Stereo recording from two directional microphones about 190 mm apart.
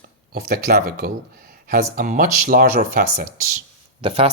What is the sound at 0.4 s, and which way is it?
Speech, 50° right (ahead or behind).